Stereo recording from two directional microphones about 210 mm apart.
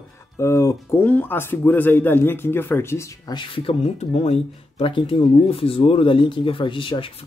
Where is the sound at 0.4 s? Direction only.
15° left (ahead or behind).